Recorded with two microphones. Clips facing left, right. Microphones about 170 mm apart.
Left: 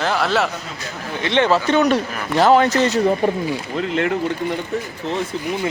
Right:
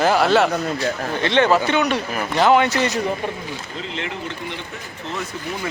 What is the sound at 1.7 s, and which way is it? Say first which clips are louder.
Speech: left 4 dB; 35° left (ahead or behind).